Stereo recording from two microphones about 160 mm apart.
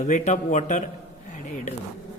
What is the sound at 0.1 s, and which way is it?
Speech, 50° left (ahead or behind).